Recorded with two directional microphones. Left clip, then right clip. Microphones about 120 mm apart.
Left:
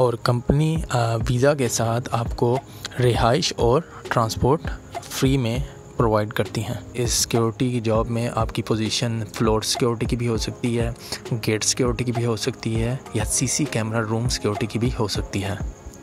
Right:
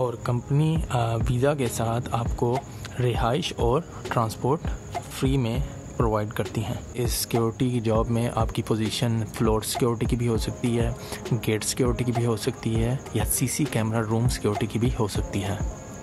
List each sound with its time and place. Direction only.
0.0 s speech: 55° left (ahead or behind); by 2.5 s 35° left (ahead or behind)
3.0 s speech: 45° left (ahead or behind); by 15.6 s 30° left (ahead or behind)